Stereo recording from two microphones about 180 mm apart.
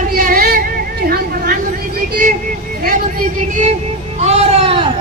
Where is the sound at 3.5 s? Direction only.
45° right (ahead or behind).